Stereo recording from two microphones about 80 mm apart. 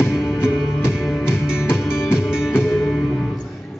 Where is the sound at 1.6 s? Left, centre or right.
Left.